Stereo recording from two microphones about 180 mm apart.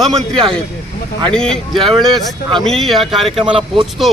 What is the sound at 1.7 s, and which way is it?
Speech, 30° right (ahead or behind).